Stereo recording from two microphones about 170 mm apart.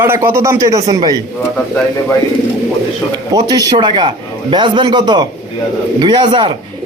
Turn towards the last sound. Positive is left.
turn(degrees=-30)  # may be behind; listen again after turning